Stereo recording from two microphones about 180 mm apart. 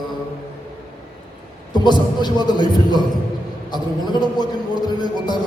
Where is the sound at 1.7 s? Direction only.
25° left (ahead or behind).